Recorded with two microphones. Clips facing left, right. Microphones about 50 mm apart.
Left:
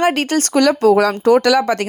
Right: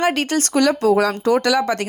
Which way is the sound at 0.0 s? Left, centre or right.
Left.